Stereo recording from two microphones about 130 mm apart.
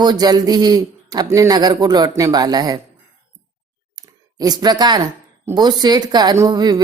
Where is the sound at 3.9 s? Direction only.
30° right (ahead or behind).